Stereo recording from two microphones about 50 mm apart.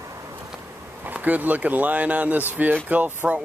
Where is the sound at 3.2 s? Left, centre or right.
Centre.